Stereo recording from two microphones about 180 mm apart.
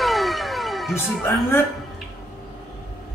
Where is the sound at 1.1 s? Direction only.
Centre (ahead or behind).